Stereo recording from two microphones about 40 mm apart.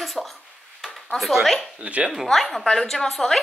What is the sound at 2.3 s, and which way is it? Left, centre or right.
Speech, centre.